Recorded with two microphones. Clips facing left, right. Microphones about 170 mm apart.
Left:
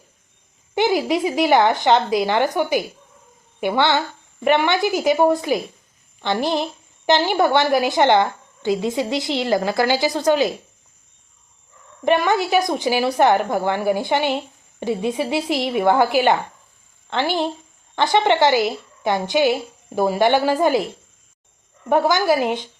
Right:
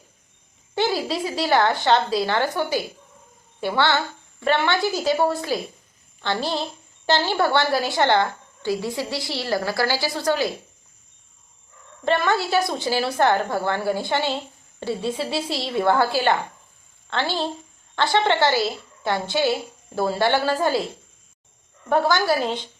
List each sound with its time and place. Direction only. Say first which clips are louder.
0.7 s a woman's voice: left 5 dB; 20° left (ahead or behind)
12.0 s a woman's voice: left 4 dB; 15° left (ahead or behind)
21.8 s a woman's voice: left 3 dB; 15° left (ahead or behind)